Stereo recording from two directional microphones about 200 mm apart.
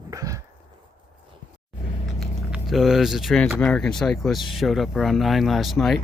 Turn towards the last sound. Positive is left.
turn(degrees=0)  # may be behind; listen again after turning